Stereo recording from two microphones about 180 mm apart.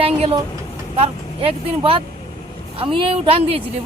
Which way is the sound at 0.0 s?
30° right (ahead or behind).